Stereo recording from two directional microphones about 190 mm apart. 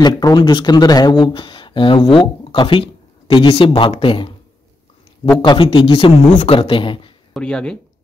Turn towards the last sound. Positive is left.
turn(degrees=5)  # may be behind; listen again after turning